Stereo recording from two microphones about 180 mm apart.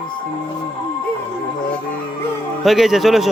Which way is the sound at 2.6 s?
Centre (ahead or behind).